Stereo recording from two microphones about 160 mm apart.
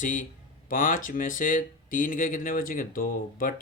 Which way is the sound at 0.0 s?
55° left (ahead or behind).